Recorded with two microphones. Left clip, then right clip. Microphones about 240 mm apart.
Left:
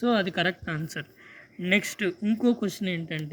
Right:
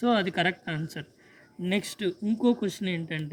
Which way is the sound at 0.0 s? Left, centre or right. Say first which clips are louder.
Even; centre.